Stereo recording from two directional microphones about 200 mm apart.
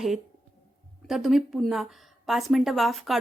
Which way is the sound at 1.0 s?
Centre (ahead or behind).